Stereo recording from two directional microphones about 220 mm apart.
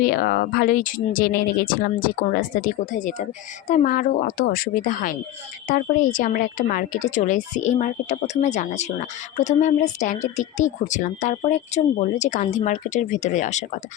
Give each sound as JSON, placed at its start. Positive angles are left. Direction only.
{"t": 0.0, "sound": "a woman's voice", "side_deg": 40}